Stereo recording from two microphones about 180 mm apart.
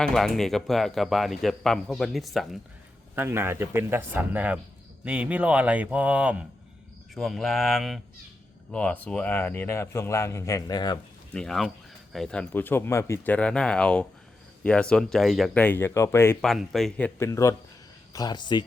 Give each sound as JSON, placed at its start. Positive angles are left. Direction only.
{"t": 0.0, "sound": "speech", "side_deg": 0}
{"t": 3.2, "sound": "a man's voice", "side_deg": -15}
{"t": 11.3, "sound": "a man's voice", "side_deg": 0}
{"t": 16.4, "sound": "speech", "side_deg": 0}
{"t": 17.2, "sound": "a man's voice", "side_deg": 15}